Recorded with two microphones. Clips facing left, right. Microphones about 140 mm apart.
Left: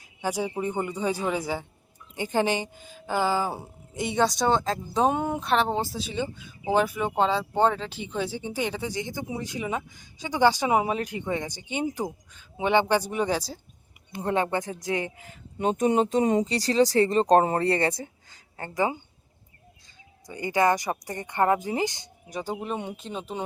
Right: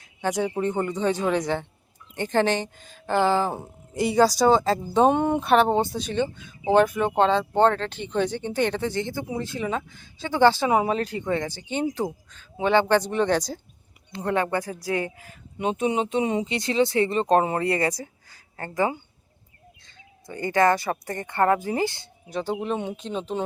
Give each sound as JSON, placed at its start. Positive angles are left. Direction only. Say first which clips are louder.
{"t": 0.0, "sound": "a woman's voice", "louder": "right 3 dB", "side_deg": 10}
{"t": 14.1, "sound": "speech", "louder": "right 1 dB", "side_deg": 20}
{"t": 15.8, "sound": "speech", "louder": "left 2 dB", "side_deg": 40}
{"t": 20.2, "sound": "speech", "louder": "right 2 dB", "side_deg": 15}